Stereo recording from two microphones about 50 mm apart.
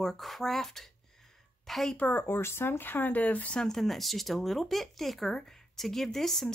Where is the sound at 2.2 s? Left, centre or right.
Left.